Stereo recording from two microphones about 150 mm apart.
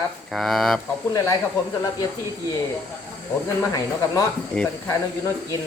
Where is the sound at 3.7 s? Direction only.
25° left (ahead or behind).